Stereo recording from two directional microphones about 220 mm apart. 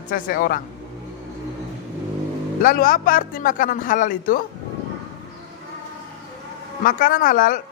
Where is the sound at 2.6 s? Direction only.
40° left (ahead or behind).